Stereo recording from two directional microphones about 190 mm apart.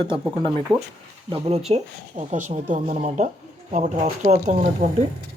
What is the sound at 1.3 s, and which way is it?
Speech, 30° right (ahead or behind).